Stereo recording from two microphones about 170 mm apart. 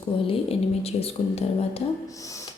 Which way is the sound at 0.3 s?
35° left (ahead or behind).